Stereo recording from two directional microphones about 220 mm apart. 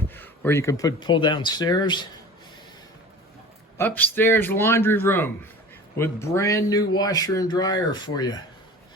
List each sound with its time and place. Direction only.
0.1 s speech: 10° left (ahead or behind)
3.8 s a man's voice: 10° left (ahead or behind)